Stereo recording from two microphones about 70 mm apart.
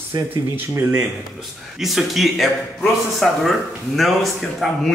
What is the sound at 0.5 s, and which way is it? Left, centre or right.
Speech, right.